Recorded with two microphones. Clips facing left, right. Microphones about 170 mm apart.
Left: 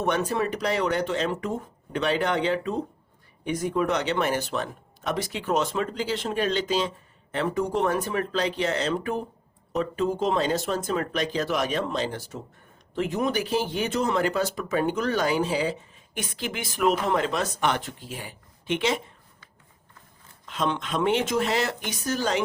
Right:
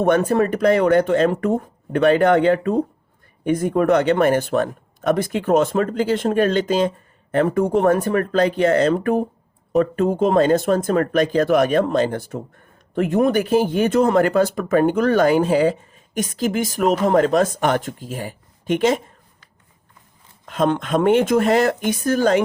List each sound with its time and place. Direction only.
0.0 s speech: 50° right (ahead or behind)
20.4 s speech: 50° right (ahead or behind)